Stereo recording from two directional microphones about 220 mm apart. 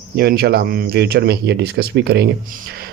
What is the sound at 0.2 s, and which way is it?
Speech, 45° right (ahead or behind).